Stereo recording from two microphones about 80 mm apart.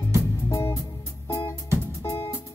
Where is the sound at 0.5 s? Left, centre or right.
Left.